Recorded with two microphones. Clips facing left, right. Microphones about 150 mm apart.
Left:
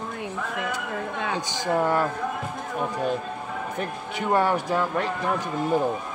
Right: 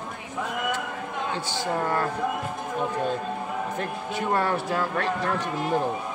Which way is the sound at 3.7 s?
15° left (ahead or behind).